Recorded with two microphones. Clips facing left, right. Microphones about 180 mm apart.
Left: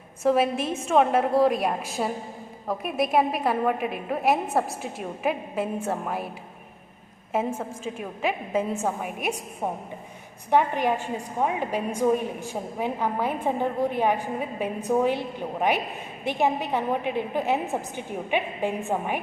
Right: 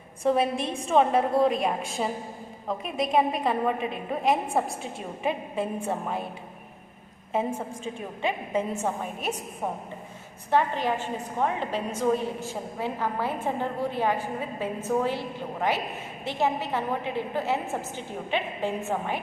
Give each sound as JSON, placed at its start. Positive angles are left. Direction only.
{"t": 0.2, "sound": "a woman's voice", "side_deg": 5}
{"t": 7.7, "sound": "a woman's voice", "side_deg": 5}
{"t": 10.5, "sound": "a woman's voice", "side_deg": 15}